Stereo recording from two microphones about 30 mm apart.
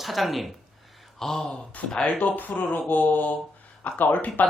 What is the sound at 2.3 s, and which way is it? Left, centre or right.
Speech, left.